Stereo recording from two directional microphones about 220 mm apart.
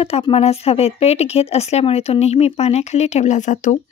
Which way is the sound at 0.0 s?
25° left (ahead or behind).